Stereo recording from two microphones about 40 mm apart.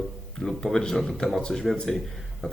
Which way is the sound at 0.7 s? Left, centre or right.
Centre.